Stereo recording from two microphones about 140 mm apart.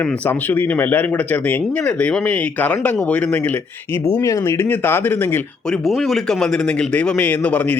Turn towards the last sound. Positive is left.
turn(degrees=10)  # may be behind; listen again after turning